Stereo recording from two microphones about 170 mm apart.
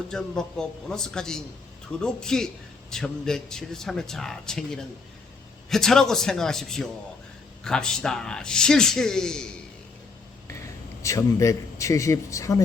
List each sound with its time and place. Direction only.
0.1 s a man's voice: 5° left (ahead or behind)
11.0 s a man's voice: 20° left (ahead or behind)